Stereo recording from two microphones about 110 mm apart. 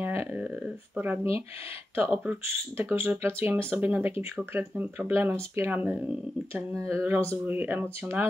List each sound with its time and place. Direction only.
0.0 s a sound: 20° right (ahead or behind)
0.9 s speech: 20° right (ahead or behind)
2.4 s speech: 20° right (ahead or behind)